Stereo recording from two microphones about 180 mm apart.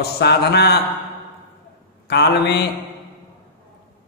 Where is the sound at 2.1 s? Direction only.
70° left (ahead or behind).